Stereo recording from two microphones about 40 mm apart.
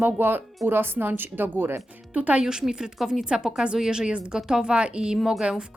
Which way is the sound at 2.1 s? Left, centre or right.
Right.